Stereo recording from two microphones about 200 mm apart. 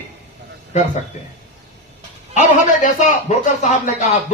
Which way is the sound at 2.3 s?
40° left (ahead or behind).